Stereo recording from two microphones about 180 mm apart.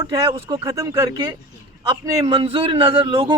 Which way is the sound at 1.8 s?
25° right (ahead or behind).